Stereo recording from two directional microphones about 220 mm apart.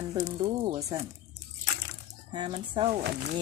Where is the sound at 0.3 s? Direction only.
25° right (ahead or behind).